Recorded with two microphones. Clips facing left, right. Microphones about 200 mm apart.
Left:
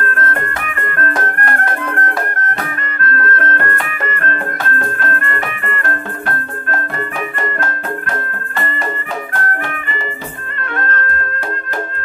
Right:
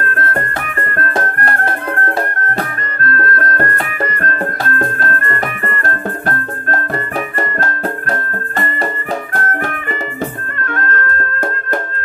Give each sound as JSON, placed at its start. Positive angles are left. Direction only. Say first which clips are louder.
{"t": 0.1, "sound": "music", "louder": "right 1 dB", "side_deg": -35}